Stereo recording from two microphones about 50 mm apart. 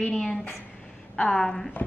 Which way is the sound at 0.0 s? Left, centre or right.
Centre.